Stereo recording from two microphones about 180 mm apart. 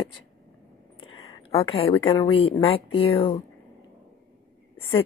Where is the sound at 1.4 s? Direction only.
30° left (ahead or behind).